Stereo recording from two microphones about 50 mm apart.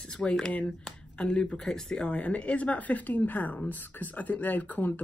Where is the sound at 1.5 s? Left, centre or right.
Centre.